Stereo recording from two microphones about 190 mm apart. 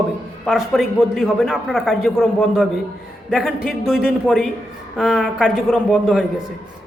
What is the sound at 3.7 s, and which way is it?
A man's voice, centre (ahead or behind).